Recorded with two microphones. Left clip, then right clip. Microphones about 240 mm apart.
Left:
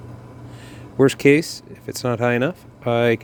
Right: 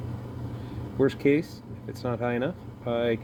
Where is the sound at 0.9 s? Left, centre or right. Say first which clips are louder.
Left 9 dB; left.